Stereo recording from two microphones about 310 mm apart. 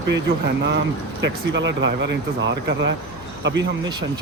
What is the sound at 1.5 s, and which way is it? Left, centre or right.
Speech, right.